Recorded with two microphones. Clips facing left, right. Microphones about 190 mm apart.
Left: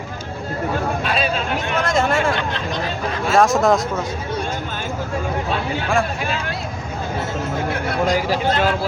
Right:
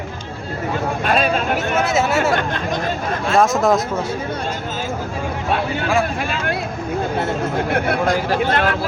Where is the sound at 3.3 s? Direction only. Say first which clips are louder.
Even; centre (ahead or behind).